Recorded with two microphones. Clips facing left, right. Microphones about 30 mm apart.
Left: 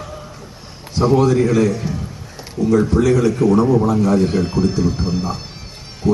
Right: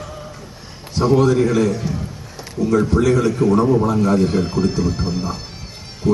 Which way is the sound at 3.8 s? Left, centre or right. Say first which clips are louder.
Left 1 dB; centre.